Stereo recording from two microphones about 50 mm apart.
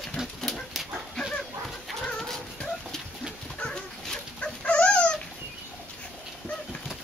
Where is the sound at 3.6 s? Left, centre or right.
Centre.